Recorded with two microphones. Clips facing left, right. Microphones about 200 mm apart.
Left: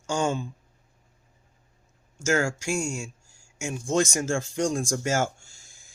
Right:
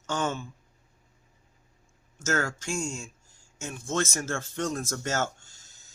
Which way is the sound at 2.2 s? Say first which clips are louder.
Left 4 dB; 10° left (ahead or behind).